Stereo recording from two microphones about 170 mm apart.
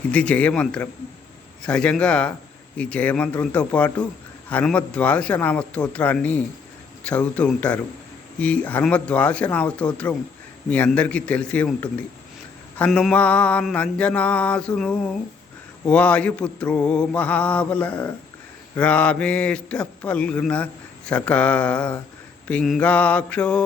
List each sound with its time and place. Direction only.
0.1 s mantra: 10° left (ahead or behind)